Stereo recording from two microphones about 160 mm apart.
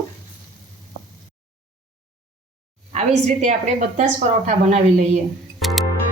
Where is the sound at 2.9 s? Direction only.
45° right (ahead or behind).